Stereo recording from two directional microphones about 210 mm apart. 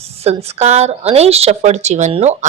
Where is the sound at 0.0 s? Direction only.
30° right (ahead or behind).